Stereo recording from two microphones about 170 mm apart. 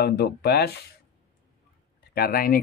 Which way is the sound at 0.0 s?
70° left (ahead or behind).